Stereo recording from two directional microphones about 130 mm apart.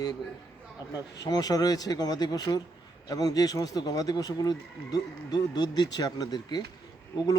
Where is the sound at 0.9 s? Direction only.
30° left (ahead or behind).